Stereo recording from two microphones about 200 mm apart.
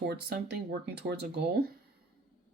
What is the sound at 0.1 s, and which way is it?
Speech, 55° right (ahead or behind).